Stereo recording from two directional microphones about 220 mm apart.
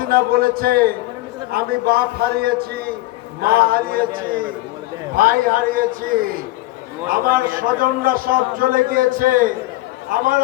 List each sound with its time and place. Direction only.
0.0 s a man's voice: 40° right (ahead or behind)
7.1 s a man's voice: 40° right (ahead or behind)